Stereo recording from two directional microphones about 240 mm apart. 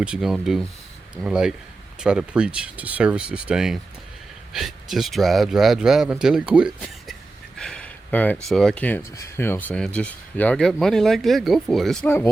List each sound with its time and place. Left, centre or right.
0.0 s speech: centre